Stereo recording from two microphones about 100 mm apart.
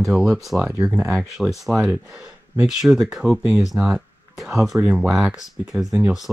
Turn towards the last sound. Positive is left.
turn(degrees=-5)  # may be behind; listen again after turning